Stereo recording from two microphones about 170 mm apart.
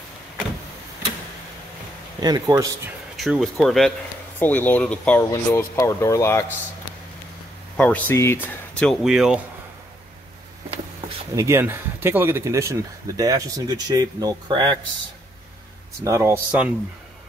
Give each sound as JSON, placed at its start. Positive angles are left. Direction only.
{"t": 2.1, "sound": "speech", "side_deg": -25}
{"t": 3.2, "sound": "speech", "side_deg": 0}
{"t": 7.7, "sound": "speech", "side_deg": 10}
{"t": 8.7, "sound": "speech", "side_deg": 0}
{"t": 11.3, "sound": "speech", "side_deg": -15}
{"t": 16.0, "sound": "speech", "side_deg": -15}